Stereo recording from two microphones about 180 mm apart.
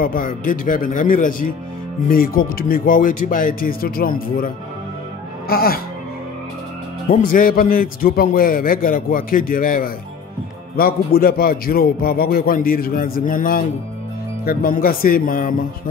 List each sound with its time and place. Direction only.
0.0 s a man's voice: 50° left (ahead or behind)
5.5 s a man's voice: 55° left (ahead or behind)
7.1 s a man's voice: 50° left (ahead or behind)